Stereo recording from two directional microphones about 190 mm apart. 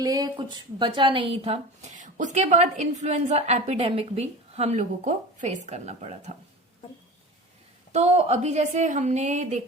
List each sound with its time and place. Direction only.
0.0 s a woman's voice: 20° right (ahead or behind); by 6.3 s 35° right (ahead or behind)
7.9 s a woman's voice: 35° right (ahead or behind)